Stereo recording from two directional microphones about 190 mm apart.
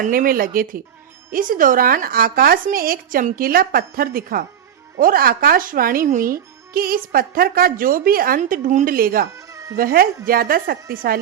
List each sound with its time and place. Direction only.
0.0 s speech: 45° right (ahead or behind)